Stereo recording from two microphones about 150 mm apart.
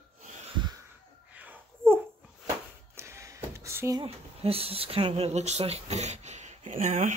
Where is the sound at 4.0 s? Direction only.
40° right (ahead or behind).